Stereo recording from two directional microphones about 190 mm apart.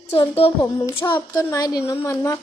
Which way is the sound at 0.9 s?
25° left (ahead or behind).